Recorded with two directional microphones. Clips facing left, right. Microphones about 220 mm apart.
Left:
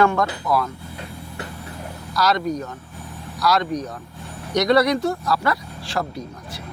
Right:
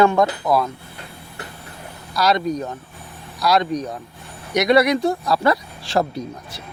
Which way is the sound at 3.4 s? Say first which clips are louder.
Right 2 dB; 15° right (ahead or behind).